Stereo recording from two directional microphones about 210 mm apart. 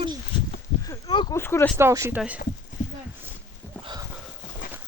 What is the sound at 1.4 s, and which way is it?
Speech, 10° left (ahead or behind).